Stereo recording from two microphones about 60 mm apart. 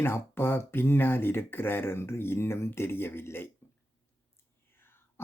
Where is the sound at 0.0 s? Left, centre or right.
Left.